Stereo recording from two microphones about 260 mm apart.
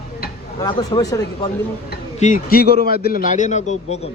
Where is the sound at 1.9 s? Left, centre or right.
Left.